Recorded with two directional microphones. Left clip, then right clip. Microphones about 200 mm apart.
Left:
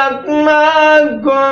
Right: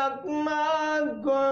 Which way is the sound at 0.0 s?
50° right (ahead or behind).